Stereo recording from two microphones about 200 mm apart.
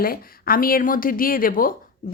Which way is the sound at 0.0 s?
45° left (ahead or behind).